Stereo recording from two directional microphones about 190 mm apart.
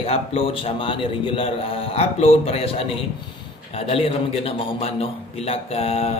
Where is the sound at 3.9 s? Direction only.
30° left (ahead or behind).